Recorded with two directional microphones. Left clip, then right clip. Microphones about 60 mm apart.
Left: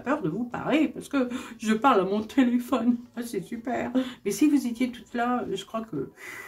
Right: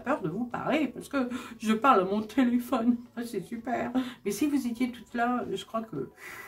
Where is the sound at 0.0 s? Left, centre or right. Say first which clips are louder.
Left 2 dB; right.